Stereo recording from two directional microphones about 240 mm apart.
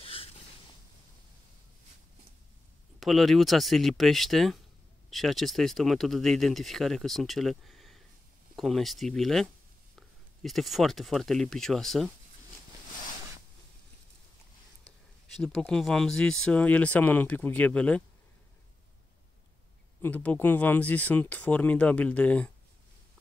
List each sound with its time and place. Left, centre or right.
0.0 s a sound: left
3.0 s speech: centre
15.3 s speech: centre
20.0 s speech: centre